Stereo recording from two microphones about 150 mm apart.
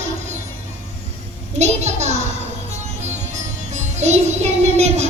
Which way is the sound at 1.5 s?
50° right (ahead or behind).